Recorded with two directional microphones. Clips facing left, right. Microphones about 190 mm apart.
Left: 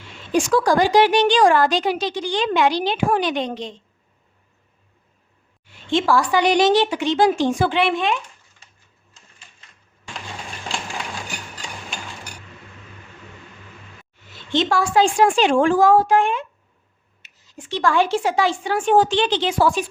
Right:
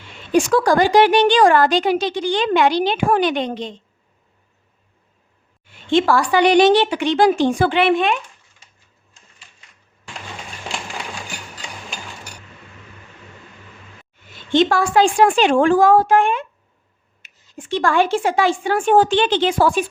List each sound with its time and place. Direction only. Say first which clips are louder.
0.5 s a woman's voice: right 1 dB; 55° right (ahead or behind)
5.9 s a woman's voice: right 2 dB; 60° right (ahead or behind)
14.5 s a woman's voice: right 3 dB; 55° right (ahead or behind)